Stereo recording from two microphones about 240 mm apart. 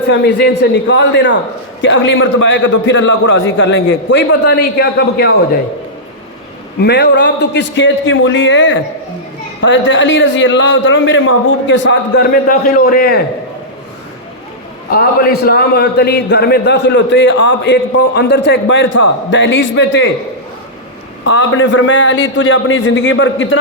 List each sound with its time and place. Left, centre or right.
0.1 s a man's voice: left
6.8 s a man's voice: left
14.8 s a man's voice: left
21.2 s a man's voice: left